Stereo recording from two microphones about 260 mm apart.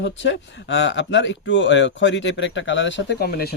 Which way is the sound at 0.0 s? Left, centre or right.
Left.